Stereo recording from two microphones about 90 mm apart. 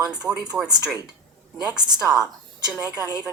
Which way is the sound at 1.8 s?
50° right (ahead or behind).